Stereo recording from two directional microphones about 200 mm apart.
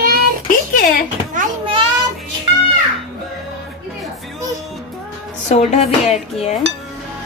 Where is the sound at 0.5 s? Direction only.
45° left (ahead or behind).